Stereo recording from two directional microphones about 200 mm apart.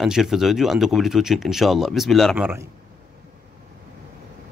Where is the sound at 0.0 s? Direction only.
Centre (ahead or behind).